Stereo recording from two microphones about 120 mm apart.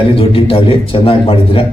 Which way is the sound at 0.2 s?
50° left (ahead or behind).